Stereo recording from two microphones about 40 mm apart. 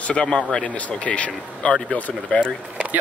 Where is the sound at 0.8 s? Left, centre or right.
Left.